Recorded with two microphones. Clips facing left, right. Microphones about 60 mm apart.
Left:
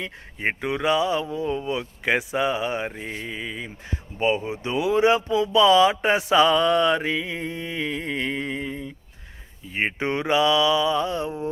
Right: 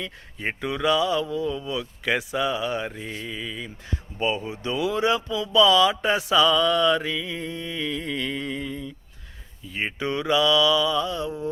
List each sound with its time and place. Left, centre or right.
0.0 s speech: left